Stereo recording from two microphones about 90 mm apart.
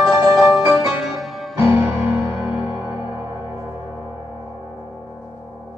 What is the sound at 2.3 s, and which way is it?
Music, 10° right (ahead or behind).